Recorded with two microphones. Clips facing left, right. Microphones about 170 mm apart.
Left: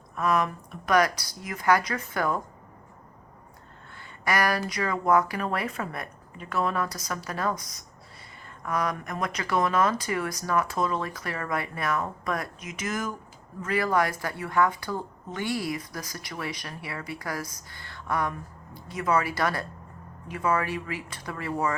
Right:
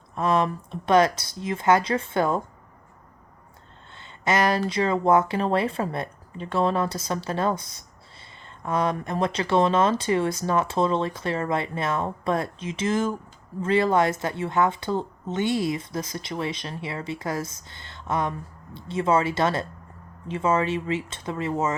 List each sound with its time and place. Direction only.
0.2 s speech: 30° right (ahead or behind)
3.9 s speech: 25° right (ahead or behind)